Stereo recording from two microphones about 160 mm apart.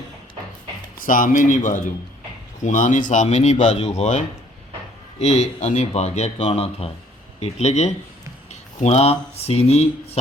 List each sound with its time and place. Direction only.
0.9 s speech: 60° left (ahead or behind)
5.2 s speech: 45° left (ahead or behind)